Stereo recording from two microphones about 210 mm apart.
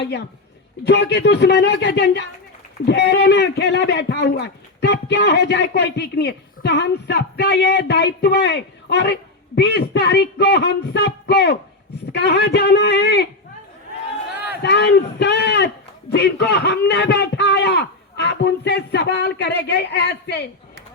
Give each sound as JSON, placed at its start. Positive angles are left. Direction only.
{"t": 0.9, "sound": "speech", "side_deg": 50}
{"t": 14.5, "sound": "speech", "side_deg": 55}